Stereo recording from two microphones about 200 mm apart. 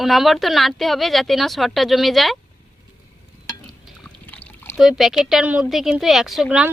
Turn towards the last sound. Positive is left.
turn(degrees=0)  # may be behind; listen again after turning